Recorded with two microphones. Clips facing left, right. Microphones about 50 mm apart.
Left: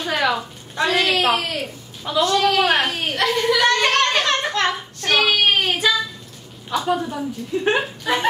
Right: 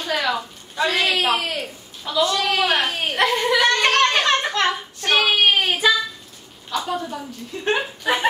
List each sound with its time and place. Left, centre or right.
0.1 s a sound: centre
1.3 s speech: centre
2.1 s a woman's voice: centre
2.9 s speech: centre
3.2 s a sound: centre
6.7 s a woman's voice: centre
8.0 s speech: centre